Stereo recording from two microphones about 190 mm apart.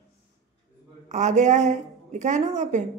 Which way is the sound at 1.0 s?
40° right (ahead or behind).